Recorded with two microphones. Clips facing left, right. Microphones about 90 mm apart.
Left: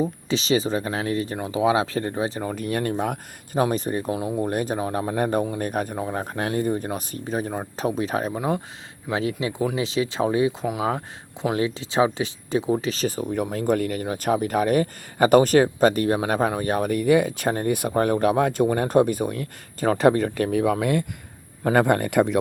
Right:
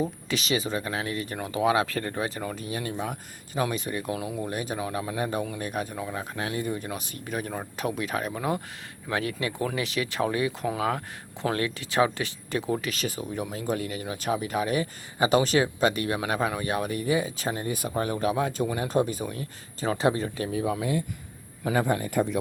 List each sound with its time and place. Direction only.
0.3 s speech: 30° left (ahead or behind)
2.6 s speech: 55° left (ahead or behind); by 8.3 s 30° left (ahead or behind)
8.3 s speech: 20° left (ahead or behind)
12.9 s speech: 35° left (ahead or behind); by 20.7 s 75° left (ahead or behind)
21.6 s speech: 60° left (ahead or behind)